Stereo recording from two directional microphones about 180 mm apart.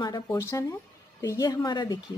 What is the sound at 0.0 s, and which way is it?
Speech, 20° left (ahead or behind).